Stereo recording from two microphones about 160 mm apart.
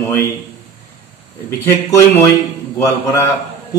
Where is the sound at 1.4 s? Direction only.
15° left (ahead or behind).